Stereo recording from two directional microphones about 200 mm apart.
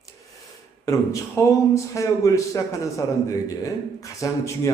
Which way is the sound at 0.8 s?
15° left (ahead or behind).